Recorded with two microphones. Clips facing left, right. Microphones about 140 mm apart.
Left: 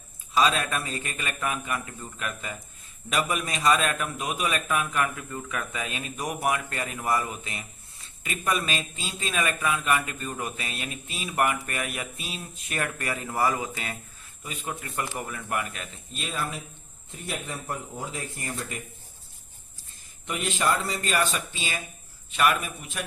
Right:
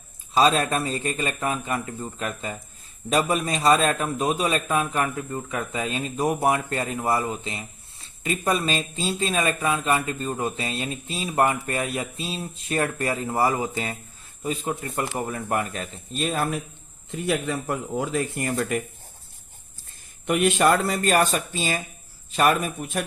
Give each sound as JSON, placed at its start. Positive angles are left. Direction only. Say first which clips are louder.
{"t": 0.3, "sound": "a man's voice", "louder": "right 4 dB", "side_deg": -35}
{"t": 17.1, "sound": "speech", "louder": "right 10 dB", "side_deg": -90}
{"t": 20.2, "sound": "speech", "louder": "right 8 dB", "side_deg": -60}